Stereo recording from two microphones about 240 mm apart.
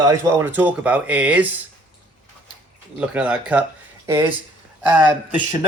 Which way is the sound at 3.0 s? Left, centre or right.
Centre.